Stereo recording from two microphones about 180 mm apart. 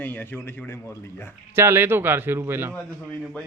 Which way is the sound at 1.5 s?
15° right (ahead or behind).